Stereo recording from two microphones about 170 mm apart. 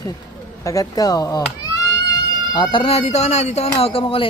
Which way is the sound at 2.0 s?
25° left (ahead or behind).